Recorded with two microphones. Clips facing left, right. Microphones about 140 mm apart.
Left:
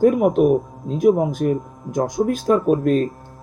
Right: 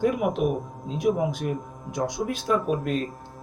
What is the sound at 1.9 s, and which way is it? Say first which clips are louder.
Speech: left 8 dB; 45° left (ahead or behind).